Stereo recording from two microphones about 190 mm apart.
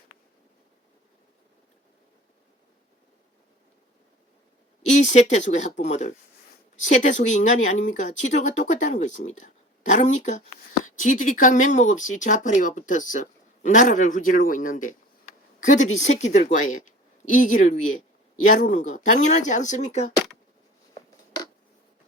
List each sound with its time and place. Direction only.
4.9 s speech: 40° left (ahead or behind)